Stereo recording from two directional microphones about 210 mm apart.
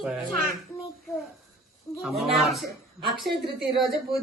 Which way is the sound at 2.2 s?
Centre (ahead or behind).